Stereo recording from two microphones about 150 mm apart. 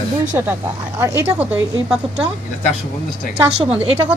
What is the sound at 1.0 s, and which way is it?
A woman's voice, 15° right (ahead or behind).